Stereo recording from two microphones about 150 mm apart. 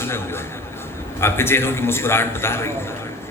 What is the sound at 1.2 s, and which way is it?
A man's voice, 15° left (ahead or behind).